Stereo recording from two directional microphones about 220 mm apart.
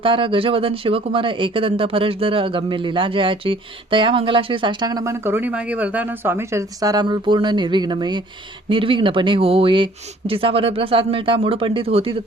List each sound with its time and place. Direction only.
0.0 s speech: 25° right (ahead or behind)